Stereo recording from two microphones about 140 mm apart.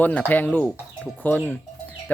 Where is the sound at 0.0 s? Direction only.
10° left (ahead or behind).